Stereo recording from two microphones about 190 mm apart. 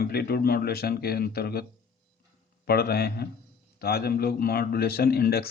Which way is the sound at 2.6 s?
55° left (ahead or behind).